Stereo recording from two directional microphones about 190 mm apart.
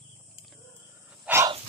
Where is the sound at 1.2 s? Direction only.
15° right (ahead or behind).